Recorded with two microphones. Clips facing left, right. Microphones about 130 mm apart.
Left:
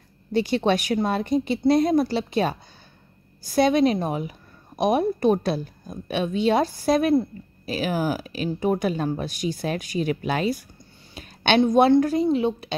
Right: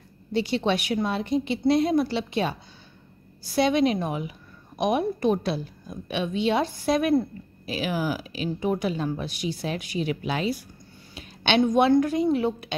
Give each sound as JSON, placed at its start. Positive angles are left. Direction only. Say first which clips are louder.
{"t": 0.3, "sound": "speech", "louder": "left 3 dB", "side_deg": 45}
{"t": 3.5, "sound": "a woman's voice", "louder": "left 3 dB", "side_deg": 40}
{"t": 11.1, "sound": "a sound", "louder": "left 3 dB", "side_deg": 45}
{"t": 11.6, "sound": "a woman's voice", "louder": "left 2 dB", "side_deg": 30}
{"t": 12.3, "sound": "a woman's voice", "louder": "left 2 dB", "side_deg": 20}